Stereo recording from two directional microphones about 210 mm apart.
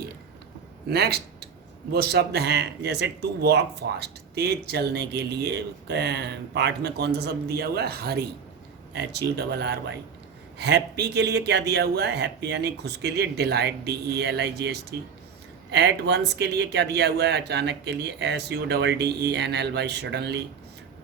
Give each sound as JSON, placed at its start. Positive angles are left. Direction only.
{"t": 0.9, "sound": "speech", "side_deg": -50}